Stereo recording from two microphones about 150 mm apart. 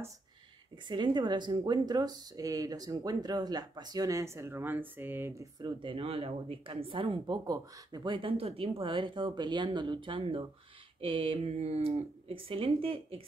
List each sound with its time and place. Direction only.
0.8 s speech: 30° right (ahead or behind)
5.8 s speech: 35° right (ahead or behind)